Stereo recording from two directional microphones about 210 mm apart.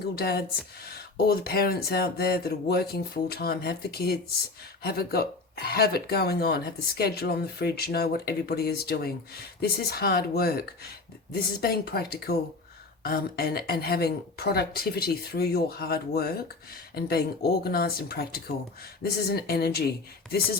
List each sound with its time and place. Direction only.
0.2 s speech: 50° left (ahead or behind)